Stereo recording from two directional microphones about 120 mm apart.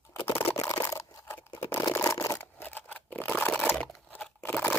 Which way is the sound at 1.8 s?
25° left (ahead or behind).